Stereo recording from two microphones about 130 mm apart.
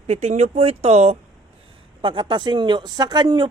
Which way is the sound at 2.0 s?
40° right (ahead or behind).